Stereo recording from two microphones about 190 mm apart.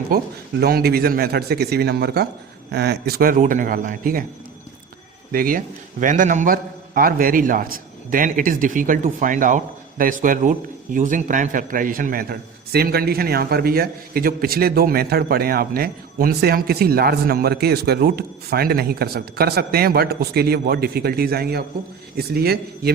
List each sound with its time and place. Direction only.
0.6 s a man's voice: 55° right (ahead or behind)
5.3 s a man's voice: 50° right (ahead or behind)